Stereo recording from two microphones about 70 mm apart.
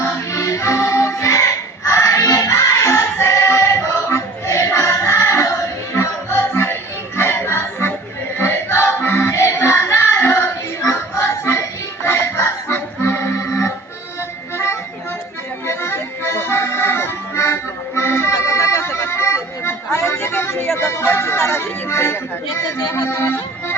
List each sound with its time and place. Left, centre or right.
0.0 s music: left
15.6 s accordion: left
20.7 s music: left